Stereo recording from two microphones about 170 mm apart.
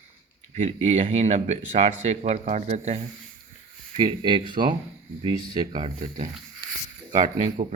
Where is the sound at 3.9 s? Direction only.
30° right (ahead or behind).